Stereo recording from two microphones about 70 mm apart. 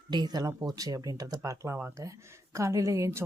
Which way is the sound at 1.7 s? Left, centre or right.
Right.